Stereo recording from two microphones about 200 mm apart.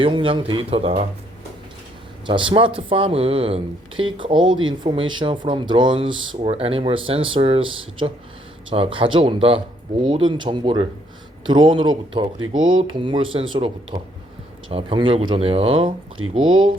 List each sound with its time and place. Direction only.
0.0 s speech: 25° right (ahead or behind)
2.2 s speech: 25° right (ahead or behind)
16.2 s speech: 90° right